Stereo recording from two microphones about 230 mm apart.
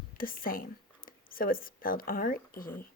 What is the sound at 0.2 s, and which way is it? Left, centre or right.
A woman's voice, left.